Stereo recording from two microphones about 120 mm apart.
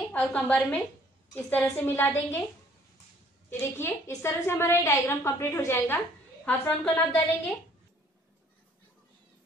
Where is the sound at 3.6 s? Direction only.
20° left (ahead or behind).